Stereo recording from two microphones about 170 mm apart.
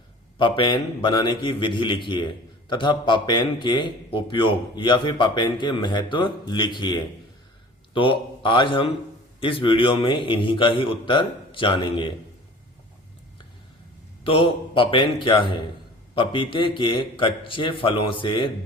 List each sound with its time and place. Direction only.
0.3 s a man's voice: 30° left (ahead or behind)
14.3 s a man's voice: 30° left (ahead or behind)